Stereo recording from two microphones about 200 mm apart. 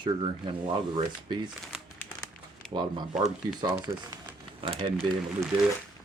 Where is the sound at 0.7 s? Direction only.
25° right (ahead or behind).